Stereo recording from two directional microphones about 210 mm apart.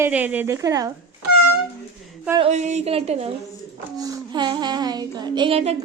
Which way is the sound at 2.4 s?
30° right (ahead or behind).